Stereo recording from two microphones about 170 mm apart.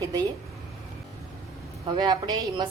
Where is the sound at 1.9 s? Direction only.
25° right (ahead or behind).